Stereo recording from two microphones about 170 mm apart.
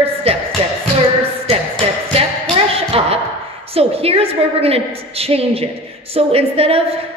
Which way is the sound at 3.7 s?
35° right (ahead or behind).